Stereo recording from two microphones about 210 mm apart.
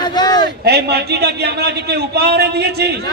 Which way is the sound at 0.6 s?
50° right (ahead or behind).